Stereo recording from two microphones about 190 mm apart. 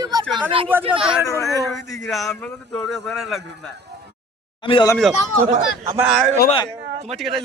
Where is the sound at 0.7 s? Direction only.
10° right (ahead or behind).